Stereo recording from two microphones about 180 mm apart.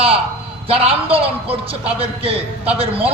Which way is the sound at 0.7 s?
30° right (ahead or behind).